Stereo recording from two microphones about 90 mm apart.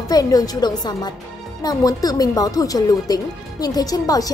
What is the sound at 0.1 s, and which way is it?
Speech, 45° left (ahead or behind).